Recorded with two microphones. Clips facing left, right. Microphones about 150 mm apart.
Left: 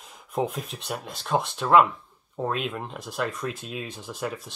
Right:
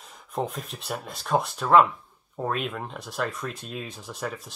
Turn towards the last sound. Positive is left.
turn(degrees=0)  # may be behind; listen again after turning